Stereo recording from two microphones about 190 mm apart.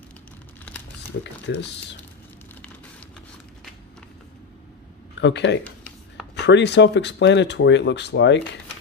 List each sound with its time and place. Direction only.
1.2 s speech: 65° left (ahead or behind)
5.2 s speech: 70° left (ahead or behind)